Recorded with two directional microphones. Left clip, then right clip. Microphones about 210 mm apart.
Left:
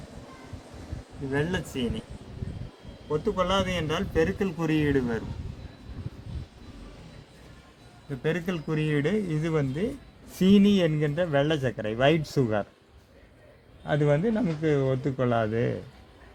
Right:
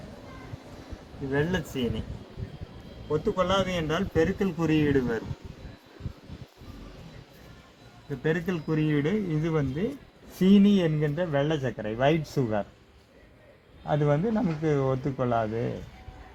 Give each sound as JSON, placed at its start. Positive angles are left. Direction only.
{"t": 1.3, "sound": "a man's voice", "side_deg": 0}
{"t": 3.1, "sound": "a man's voice", "side_deg": 0}
{"t": 8.2, "sound": "a man's voice", "side_deg": 50}
{"t": 13.8, "sound": "a man's voice", "side_deg": 35}